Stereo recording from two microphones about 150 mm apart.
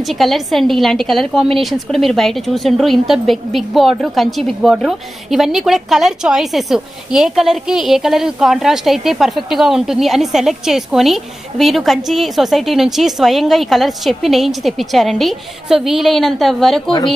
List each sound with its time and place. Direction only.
0.0 s a woman's voice: centre (ahead or behind)